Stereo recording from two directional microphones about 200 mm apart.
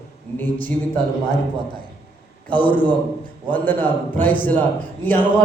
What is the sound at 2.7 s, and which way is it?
A man's voice, 10° left (ahead or behind).